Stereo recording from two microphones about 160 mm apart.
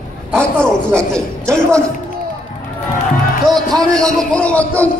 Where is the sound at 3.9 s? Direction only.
5° left (ahead or behind).